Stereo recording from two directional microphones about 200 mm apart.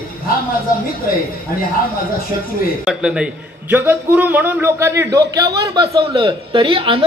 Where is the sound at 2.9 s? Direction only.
5° right (ahead or behind); by 7.0 s 25° right (ahead or behind).